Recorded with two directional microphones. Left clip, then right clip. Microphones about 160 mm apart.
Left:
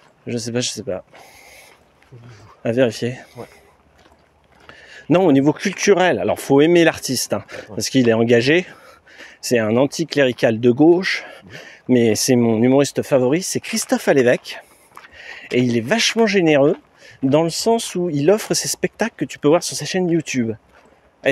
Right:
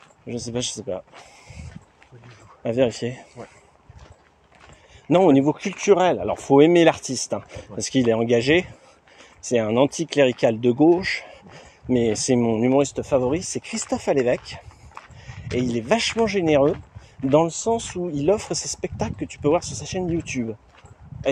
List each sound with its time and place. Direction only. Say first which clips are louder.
0.3 s speech: left 5 dB; 40° left (ahead or behind)
2.6 s speech: left 4 dB; 40° left (ahead or behind)
4.8 s speech: left 1 dB; 50° left (ahead or behind)
12.6 s speech: left 4 dB; 60° left (ahead or behind)
15.1 s a sound: left 10 dB; 55° left (ahead or behind)
15.5 s speech: left 4 dB; 45° left (ahead or behind)